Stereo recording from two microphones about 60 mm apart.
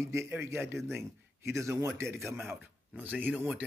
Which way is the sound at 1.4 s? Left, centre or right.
Right.